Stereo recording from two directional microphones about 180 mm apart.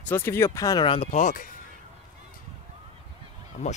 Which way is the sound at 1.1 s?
45° left (ahead or behind).